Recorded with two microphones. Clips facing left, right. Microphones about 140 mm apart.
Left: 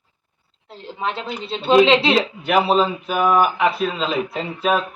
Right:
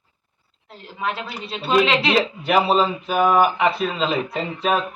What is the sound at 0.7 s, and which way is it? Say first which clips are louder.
Speech: left 1 dB; 30° left (ahead or behind).